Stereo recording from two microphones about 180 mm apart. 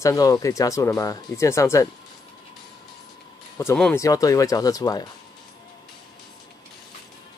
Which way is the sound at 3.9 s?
20° left (ahead or behind).